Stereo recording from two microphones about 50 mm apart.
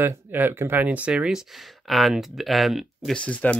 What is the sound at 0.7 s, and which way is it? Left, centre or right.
Speech, right.